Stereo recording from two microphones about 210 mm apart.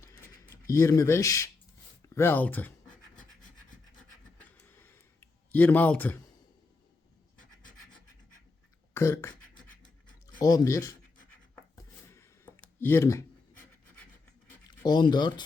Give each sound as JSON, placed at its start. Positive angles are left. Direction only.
{"t": 0.0, "sound": "writing", "side_deg": 15}
{"t": 2.1, "sound": "speech", "side_deg": 10}
{"t": 4.4, "sound": "a sound", "side_deg": 10}
{"t": 8.9, "sound": "beatboxing", "side_deg": 10}
{"t": 10.4, "sound": "speech", "side_deg": 15}
{"t": 12.0, "sound": "a sound", "side_deg": 10}
{"t": 14.8, "sound": "speech", "side_deg": 20}